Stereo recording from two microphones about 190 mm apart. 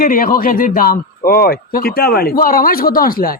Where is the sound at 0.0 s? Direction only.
50° left (ahead or behind).